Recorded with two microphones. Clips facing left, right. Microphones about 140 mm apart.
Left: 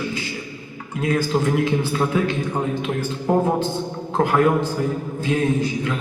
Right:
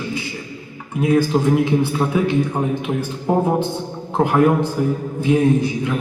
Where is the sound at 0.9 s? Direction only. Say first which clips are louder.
Right 4 dB; 15° right (ahead or behind).